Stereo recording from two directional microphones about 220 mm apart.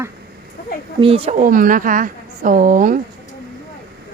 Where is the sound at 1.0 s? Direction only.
25° right (ahead or behind).